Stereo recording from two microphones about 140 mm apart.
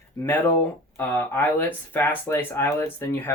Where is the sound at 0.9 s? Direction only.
15° left (ahead or behind).